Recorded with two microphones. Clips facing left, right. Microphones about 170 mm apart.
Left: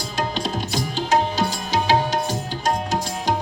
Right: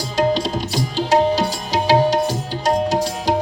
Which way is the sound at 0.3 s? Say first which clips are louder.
Right 3 dB; 35° right (ahead or behind).